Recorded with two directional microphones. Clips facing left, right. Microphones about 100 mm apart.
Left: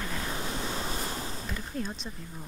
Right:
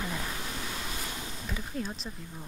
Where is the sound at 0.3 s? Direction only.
30° left (ahead or behind).